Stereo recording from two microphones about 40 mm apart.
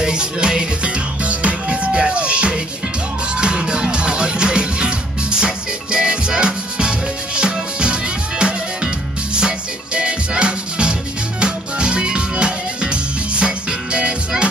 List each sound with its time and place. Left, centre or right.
0.0 s music: right